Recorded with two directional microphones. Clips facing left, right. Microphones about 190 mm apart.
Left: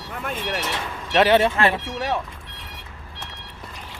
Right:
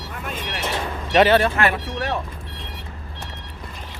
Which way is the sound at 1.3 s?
20° left (ahead or behind).